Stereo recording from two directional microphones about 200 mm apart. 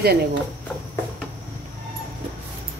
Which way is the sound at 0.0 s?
50° right (ahead or behind).